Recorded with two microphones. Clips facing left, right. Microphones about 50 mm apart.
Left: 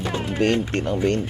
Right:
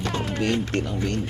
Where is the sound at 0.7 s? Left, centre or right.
Left.